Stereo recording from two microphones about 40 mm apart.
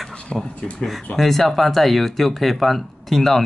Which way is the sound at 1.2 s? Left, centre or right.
Centre.